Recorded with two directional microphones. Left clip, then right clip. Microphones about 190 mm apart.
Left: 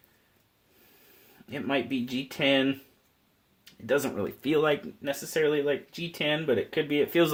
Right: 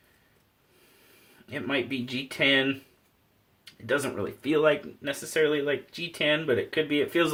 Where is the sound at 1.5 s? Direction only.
35° left (ahead or behind).